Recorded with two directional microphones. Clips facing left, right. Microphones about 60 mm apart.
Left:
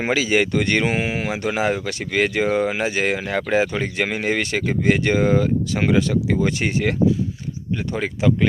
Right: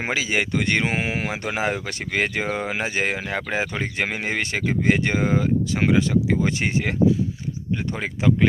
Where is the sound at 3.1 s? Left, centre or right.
Centre.